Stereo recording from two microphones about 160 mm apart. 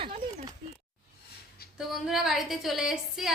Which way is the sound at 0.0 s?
40° right (ahead or behind).